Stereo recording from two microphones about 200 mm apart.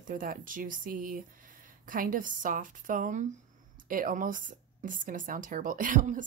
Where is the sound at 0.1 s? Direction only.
45° right (ahead or behind).